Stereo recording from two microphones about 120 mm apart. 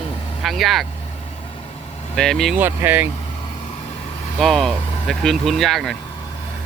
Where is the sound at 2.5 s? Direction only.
15° right (ahead or behind).